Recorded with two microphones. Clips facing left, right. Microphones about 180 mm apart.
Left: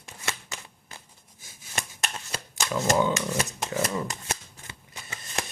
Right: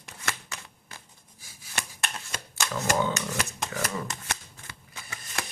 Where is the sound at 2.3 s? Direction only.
30° left (ahead or behind).